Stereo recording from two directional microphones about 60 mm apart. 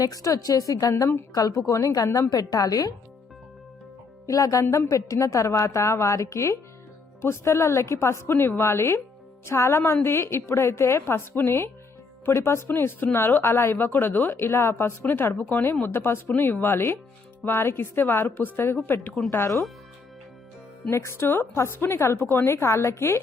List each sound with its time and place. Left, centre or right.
0.0 s a woman's voice: left
1.3 s a woman's voice: left
2.3 s a woman's voice: left
4.3 s a woman's voice: left
20.9 s a woman's voice: left